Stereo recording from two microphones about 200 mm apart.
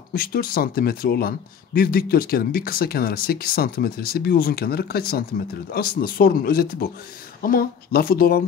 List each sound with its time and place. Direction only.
0.1 s speech: 50° left (ahead or behind)